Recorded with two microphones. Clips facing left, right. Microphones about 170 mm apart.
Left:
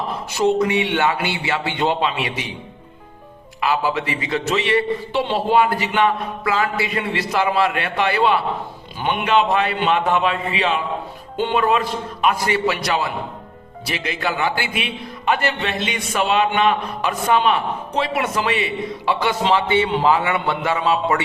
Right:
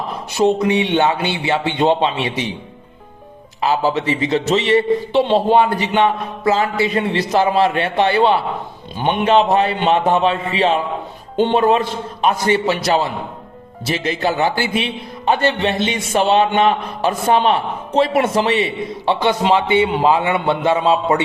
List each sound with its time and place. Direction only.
0.6 s a man's voice: 20° right (ahead or behind)
3.6 s a man's voice: 35° right (ahead or behind)
6.8 s a man's voice: 35° right (ahead or behind)